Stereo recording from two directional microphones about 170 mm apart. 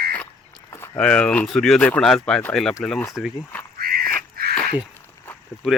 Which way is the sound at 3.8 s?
60° right (ahead or behind).